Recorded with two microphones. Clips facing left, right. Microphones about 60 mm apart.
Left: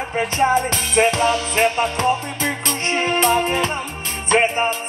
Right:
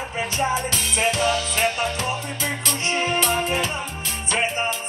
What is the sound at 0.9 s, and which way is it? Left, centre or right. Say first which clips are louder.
Music: left 5 dB; left.